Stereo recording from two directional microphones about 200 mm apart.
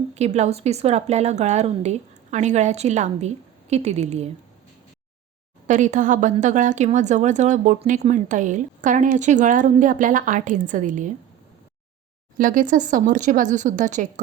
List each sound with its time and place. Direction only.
0.1 s speech: 35° right (ahead or behind)
5.6 s speech: 40° right (ahead or behind)
12.4 s speech: 40° right (ahead or behind)